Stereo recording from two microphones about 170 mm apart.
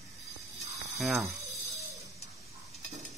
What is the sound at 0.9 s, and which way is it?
Speech, centre (ahead or behind).